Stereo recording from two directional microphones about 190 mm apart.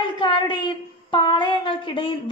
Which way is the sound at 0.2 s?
25° left (ahead or behind).